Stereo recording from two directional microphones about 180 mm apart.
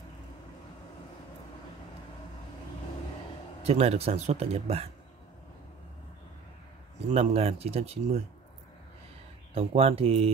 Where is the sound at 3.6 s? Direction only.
35° right (ahead or behind).